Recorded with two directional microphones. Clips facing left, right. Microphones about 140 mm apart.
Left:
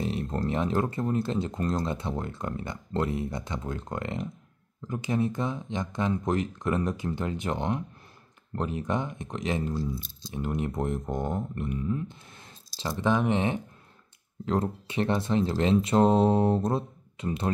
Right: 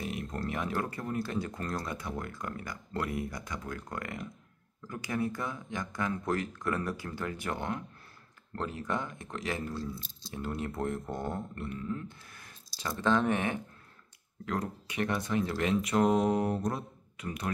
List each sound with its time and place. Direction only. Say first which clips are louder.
0.0 s speech: left 6 dB; 30° left (ahead or behind)